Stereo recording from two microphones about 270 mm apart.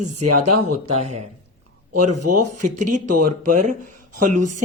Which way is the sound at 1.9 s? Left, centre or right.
Right.